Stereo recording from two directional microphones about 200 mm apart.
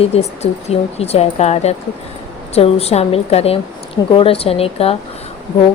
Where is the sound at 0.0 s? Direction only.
30° left (ahead or behind).